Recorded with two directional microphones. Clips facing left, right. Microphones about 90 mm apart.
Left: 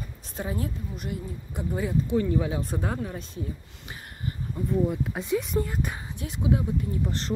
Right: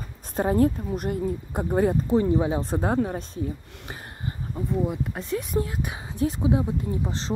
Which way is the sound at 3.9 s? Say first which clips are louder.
Right 1 dB; 30° right (ahead or behind).